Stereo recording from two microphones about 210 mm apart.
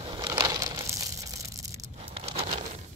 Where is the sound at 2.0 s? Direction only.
30° right (ahead or behind).